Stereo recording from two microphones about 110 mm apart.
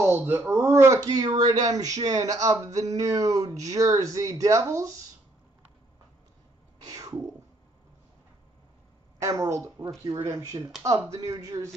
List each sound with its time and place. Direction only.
0.0 s speech: 20° right (ahead or behind)
6.9 s a sound: 30° right (ahead or behind)
9.2 s speech: 30° right (ahead or behind)